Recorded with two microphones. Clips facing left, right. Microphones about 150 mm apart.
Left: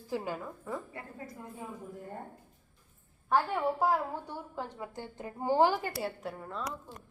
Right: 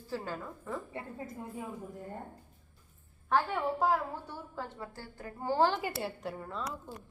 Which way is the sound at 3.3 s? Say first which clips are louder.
Left 1 dB; 10° left (ahead or behind).